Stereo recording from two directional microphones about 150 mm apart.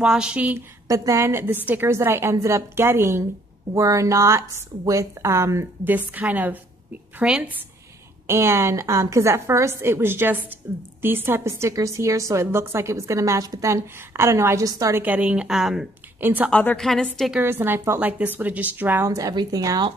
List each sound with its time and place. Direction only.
0.0 s a woman's voice: 5° right (ahead or behind)
17.4 s a woman's voice: 15° right (ahead or behind)